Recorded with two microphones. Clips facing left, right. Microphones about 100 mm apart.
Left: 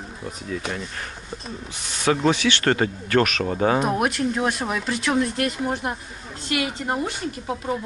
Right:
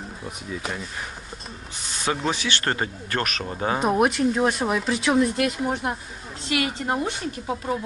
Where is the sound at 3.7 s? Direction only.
Centre (ahead or behind).